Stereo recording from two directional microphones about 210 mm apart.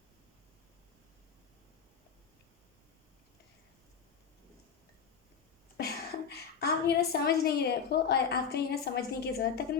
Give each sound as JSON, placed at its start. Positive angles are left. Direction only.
{"t": 5.7, "sound": "a woman's voice", "side_deg": 50}